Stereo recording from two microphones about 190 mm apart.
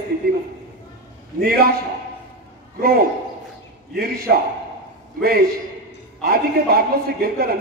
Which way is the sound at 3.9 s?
55° right (ahead or behind).